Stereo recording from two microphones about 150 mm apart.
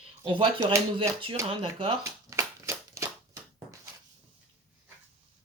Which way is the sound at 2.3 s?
20° right (ahead or behind).